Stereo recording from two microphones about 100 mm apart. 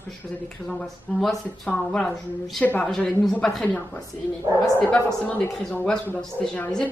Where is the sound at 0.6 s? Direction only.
5° left (ahead or behind).